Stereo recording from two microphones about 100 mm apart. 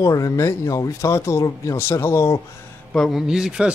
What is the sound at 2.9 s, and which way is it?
Speech, 5° left (ahead or behind).